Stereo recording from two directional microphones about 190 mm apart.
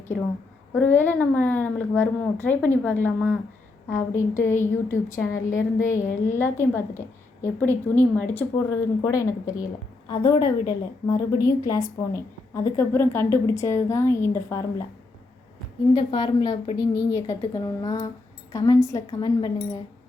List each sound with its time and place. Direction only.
0.7 s a woman's voice: 10° left (ahead or behind)
16.0 s a woman's voice: 25° left (ahead or behind)